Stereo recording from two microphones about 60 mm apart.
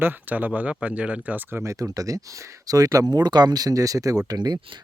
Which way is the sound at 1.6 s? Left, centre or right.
Right.